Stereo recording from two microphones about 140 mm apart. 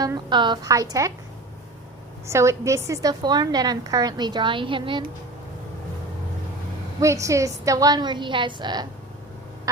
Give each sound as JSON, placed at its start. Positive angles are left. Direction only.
{"t": 0.0, "sound": "a woman's voice", "side_deg": -30}
{"t": 2.2, "sound": "a woman's voice", "side_deg": -20}
{"t": 7.0, "sound": "a woman's voice", "side_deg": -20}